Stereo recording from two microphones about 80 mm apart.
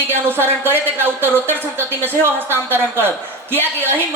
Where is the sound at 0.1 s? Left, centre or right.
Right.